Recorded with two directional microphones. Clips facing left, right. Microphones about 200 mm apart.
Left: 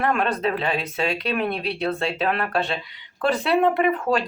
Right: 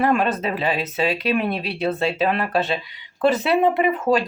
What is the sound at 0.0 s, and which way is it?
Speech, 5° right (ahead or behind).